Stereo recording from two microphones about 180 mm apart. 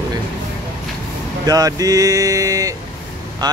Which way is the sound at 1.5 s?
20° right (ahead or behind).